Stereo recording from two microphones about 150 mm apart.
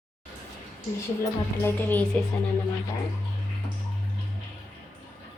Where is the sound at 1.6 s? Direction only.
10° left (ahead or behind).